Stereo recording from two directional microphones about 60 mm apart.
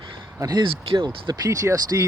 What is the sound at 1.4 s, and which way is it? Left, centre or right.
Speech, right.